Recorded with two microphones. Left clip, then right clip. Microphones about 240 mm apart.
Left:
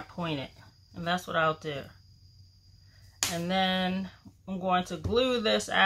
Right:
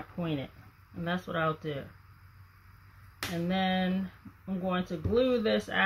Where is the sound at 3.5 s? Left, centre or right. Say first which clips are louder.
Left 2 dB; centre.